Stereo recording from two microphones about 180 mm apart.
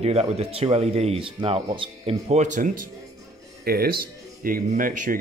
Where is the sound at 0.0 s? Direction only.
35° right (ahead or behind).